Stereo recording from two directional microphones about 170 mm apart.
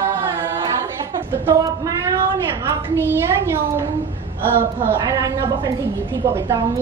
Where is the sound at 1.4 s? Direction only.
20° right (ahead or behind).